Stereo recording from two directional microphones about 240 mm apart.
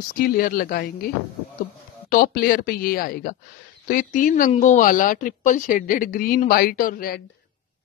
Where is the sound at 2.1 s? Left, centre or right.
Left.